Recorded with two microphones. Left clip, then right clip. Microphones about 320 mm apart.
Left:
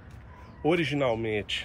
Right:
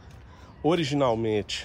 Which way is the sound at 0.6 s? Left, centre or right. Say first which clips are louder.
Right 2 dB; centre.